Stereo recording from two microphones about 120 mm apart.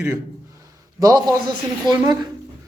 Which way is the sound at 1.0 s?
30° right (ahead or behind).